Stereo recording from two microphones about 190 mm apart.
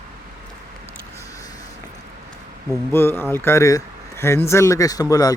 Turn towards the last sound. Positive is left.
turn(degrees=20)  # may be behind; listen again after turning